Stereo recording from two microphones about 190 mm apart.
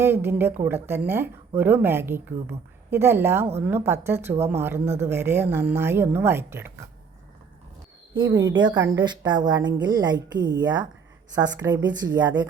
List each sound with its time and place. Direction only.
0.0 s a woman's voice: 10° right (ahead or behind)
8.1 s a woman's voice: 25° right (ahead or behind)